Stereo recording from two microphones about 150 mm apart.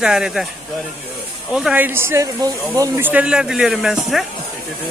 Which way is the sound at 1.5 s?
5° right (ahead or behind).